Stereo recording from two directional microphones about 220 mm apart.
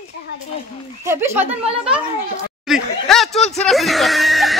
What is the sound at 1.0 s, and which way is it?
Speech, 10° right (ahead or behind).